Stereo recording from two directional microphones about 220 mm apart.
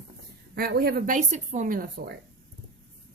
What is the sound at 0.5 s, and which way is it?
Speech, 45° right (ahead or behind).